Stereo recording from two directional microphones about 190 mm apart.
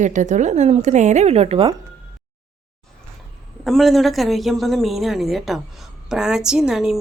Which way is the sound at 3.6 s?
Centre (ahead or behind).